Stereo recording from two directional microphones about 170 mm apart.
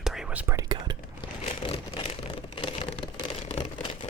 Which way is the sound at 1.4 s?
35° left (ahead or behind).